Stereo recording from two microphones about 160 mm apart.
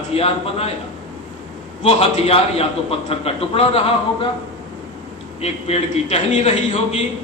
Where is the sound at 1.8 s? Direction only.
40° left (ahead or behind).